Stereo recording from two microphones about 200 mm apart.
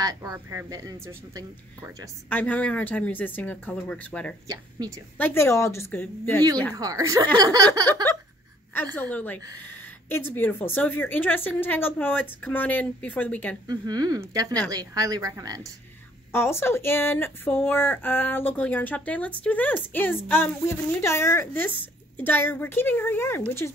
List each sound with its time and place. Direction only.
0.0 s speech: 20° right (ahead or behind)
2.2 s speech: 10° left (ahead or behind)
4.5 s speech: 15° right (ahead or behind)
5.1 s speech: 10° left (ahead or behind)
6.7 s speech: 20° right (ahead or behind)
9.1 s speech: 10° left (ahead or behind)
13.7 s speech: 20° right (ahead or behind)
16.3 s speech: 10° left (ahead or behind)